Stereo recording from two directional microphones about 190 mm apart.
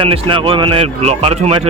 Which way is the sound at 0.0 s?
25° right (ahead or behind).